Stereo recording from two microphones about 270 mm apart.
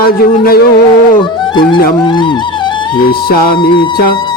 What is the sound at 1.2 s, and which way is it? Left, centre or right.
Music, centre.